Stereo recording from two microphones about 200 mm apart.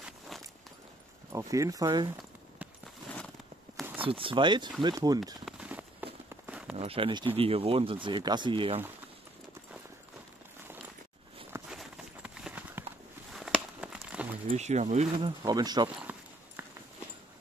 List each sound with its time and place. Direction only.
0.3 s a sound: centre (ahead or behind)
1.3 s speech: 15° right (ahead or behind)
4.0 s speech: 25° right (ahead or behind)
5.4 s a sound: 5° right (ahead or behind)
6.8 s speech: 25° right (ahead or behind)
11.7 s clip-clop: centre (ahead or behind)
13.3 s a sound: centre (ahead or behind)
14.5 s speech: 35° right (ahead or behind)
15.1 s speech: 20° right (ahead or behind)
16.6 s clip-clop: 10° right (ahead or behind)